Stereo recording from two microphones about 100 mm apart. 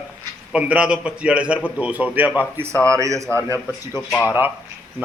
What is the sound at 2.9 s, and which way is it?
Speech, 30° right (ahead or behind).